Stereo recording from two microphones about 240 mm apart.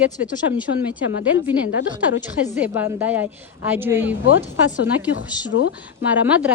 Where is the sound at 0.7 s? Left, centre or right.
Left.